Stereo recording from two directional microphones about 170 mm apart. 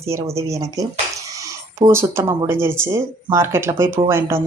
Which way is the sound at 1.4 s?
15° right (ahead or behind).